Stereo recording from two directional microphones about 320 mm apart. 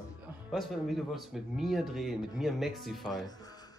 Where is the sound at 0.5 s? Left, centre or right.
Centre.